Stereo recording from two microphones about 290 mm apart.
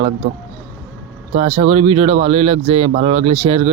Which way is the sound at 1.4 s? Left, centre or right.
Right.